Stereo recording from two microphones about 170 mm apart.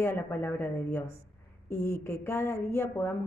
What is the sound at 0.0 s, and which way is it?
Speech, 15° left (ahead or behind).